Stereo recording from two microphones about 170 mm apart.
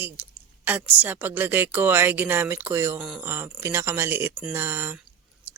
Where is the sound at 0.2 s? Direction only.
10° right (ahead or behind).